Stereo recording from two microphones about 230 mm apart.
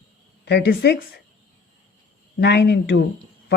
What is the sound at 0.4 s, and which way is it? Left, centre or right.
Speech, left.